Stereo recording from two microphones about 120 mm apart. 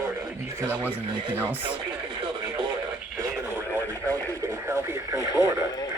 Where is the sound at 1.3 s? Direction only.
15° right (ahead or behind).